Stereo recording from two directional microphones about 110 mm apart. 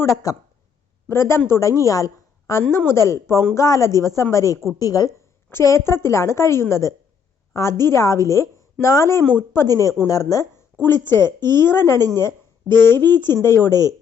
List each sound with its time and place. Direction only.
0.3 s a woman's voice: 35° left (ahead or behind)
10.8 s a woman's voice: 20° left (ahead or behind)
12.1 s a sound: 20° left (ahead or behind)
13.0 s a woman's voice: 20° left (ahead or behind)